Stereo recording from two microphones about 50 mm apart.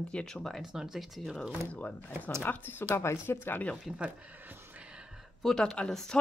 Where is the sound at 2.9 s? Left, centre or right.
Left.